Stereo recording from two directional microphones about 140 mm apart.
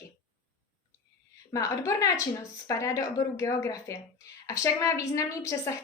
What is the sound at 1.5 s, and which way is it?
Speech, 25° left (ahead or behind).